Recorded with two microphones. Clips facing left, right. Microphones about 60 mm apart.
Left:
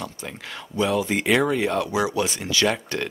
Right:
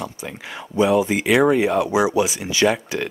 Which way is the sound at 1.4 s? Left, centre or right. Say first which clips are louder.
Right 6 dB; centre.